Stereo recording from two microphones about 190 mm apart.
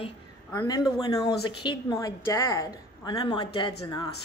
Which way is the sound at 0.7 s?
20° left (ahead or behind).